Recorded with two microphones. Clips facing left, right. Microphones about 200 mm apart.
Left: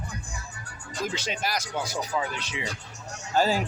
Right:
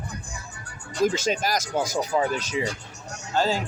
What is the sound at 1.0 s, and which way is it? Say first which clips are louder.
Speech: right 7 dB; 45° right (ahead or behind).